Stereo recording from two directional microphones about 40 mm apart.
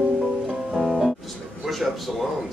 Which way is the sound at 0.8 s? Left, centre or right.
Centre.